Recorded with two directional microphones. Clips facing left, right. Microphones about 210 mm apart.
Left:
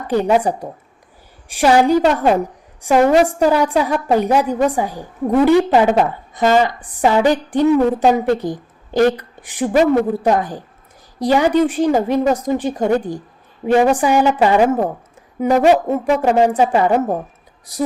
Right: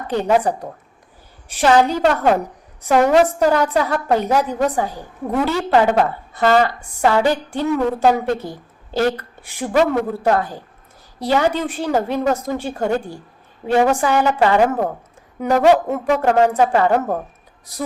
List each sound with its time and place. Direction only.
0.1 s a woman's voice: 10° left (ahead or behind)